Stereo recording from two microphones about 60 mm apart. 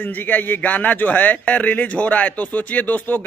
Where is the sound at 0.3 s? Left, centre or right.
Left.